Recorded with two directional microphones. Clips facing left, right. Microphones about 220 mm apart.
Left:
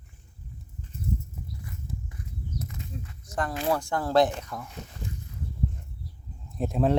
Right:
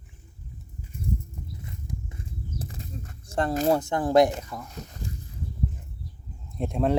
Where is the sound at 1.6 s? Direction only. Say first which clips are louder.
Right 2 dB; 25° right (ahead or behind); by 3.1 s 40° right (ahead or behind).